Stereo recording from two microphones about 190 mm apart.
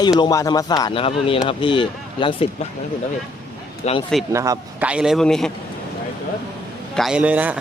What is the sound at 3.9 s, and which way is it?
Speech, 35° left (ahead or behind).